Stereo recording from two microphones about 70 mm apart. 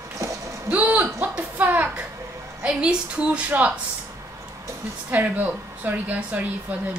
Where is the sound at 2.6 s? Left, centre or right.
Centre.